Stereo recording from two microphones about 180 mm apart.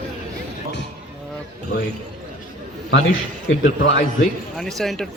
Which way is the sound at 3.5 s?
80° left.